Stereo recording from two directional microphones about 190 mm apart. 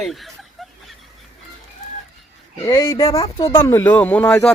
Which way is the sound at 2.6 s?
20° left (ahead or behind).